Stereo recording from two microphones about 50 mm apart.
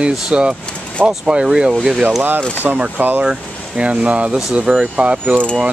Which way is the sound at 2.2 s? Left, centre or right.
Right.